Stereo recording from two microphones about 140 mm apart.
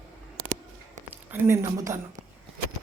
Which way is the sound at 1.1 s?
15° right (ahead or behind).